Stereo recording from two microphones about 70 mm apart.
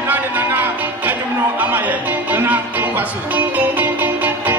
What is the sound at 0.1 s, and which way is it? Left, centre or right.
Music, right.